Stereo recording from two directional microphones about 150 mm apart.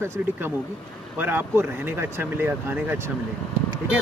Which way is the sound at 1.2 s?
15° right (ahead or behind).